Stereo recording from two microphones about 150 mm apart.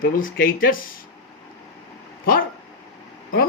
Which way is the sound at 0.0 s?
70° left (ahead or behind).